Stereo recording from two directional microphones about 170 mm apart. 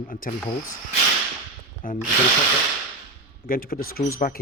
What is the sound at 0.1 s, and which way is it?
Speech, 55° left (ahead or behind).